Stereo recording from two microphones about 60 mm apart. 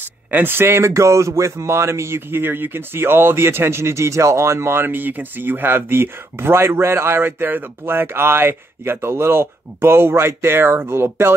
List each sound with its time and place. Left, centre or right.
0.3 s speech: right
4.8 s speech: right